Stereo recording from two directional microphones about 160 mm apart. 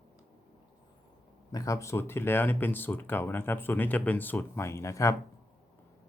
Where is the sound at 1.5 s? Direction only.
20° left (ahead or behind).